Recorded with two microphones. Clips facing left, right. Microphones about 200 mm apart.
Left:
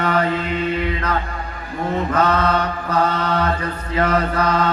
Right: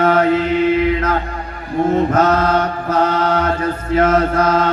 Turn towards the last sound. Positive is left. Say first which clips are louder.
# right 4 dB
turn(degrees=-45)  # may be behind; listen again after turning